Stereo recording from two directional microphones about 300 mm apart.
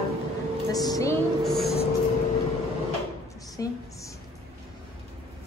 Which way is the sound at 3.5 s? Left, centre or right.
Centre.